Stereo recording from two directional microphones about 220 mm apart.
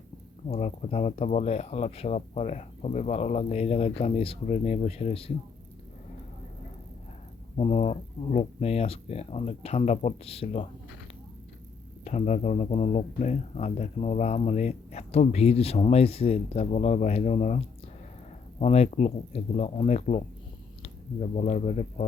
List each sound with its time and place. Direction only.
0.4 s speech: 30° left (ahead or behind)
7.5 s speech: 25° left (ahead or behind)
12.0 s speech: 30° left (ahead or behind)
18.6 s speech: 30° left (ahead or behind)